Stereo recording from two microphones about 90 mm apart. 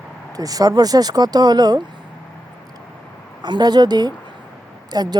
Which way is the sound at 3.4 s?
55° right (ahead or behind).